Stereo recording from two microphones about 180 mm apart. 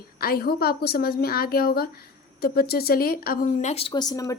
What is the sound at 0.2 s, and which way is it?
A woman's voice, 55° left (ahead or behind).